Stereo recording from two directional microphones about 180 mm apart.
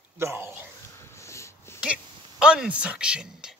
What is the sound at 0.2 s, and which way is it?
Speech, 15° right (ahead or behind).